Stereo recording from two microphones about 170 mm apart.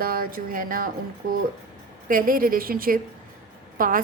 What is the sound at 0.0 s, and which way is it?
Speech, 60° right (ahead or behind).